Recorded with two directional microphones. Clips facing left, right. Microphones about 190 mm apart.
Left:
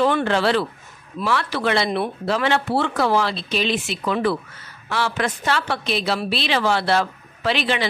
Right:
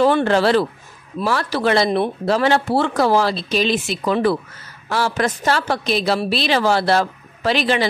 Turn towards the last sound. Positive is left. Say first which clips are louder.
# right 4 dB
turn(degrees=-40)  # may be behind; listen again after turning